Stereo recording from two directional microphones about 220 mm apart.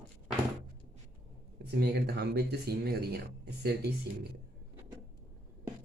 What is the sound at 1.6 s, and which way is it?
Speech, 50° right (ahead or behind).